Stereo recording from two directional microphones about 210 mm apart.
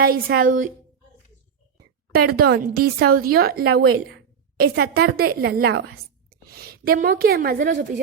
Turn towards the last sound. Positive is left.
turn(degrees=-45)  # may be behind; listen again after turning